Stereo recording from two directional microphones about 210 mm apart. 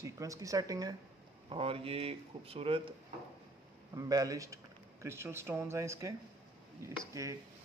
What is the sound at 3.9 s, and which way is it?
Speech, 15° right (ahead or behind).